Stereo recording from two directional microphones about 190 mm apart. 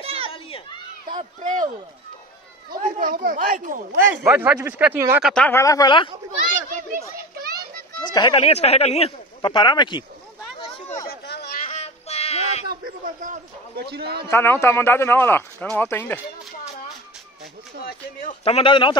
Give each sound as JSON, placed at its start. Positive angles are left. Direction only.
{"t": 0.0, "sound": "children playing", "side_deg": -30}
{"t": 1.4, "sound": "a man's voice", "side_deg": -40}
{"t": 3.0, "sound": "speech", "side_deg": -45}
{"t": 4.1, "sound": "speech", "side_deg": -10}
{"t": 5.2, "sound": "speech", "side_deg": 5}
{"t": 6.4, "sound": "children playing", "side_deg": -45}
{"t": 8.1, "sound": "speech", "side_deg": 25}
{"t": 11.1, "sound": "a sound", "side_deg": 60}
{"t": 11.6, "sound": "music", "side_deg": 35}
{"t": 12.6, "sound": "a sound", "side_deg": -45}
{"t": 14.3, "sound": "speech", "side_deg": 10}
{"t": 18.4, "sound": "speech", "side_deg": 30}